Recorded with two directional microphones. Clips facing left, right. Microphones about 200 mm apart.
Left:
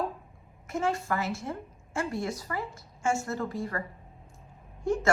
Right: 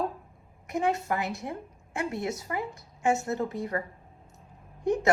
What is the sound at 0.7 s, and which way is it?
A woman's voice, 20° right (ahead or behind).